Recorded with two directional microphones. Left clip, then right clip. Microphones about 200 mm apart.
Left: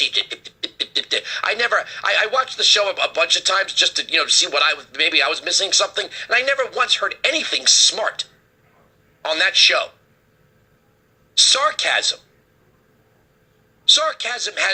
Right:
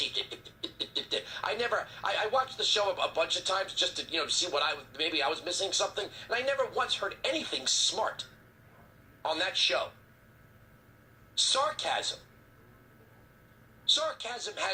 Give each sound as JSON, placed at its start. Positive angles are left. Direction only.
{"t": 0.0, "sound": "speech", "side_deg": 30}
{"t": 11.3, "sound": "a woman's voice", "side_deg": 25}
{"t": 13.8, "sound": "speech", "side_deg": 30}